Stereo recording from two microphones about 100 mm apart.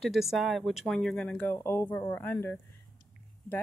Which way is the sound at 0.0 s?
5° right (ahead or behind).